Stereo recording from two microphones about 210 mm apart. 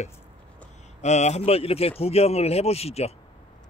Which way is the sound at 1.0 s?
35° left (ahead or behind).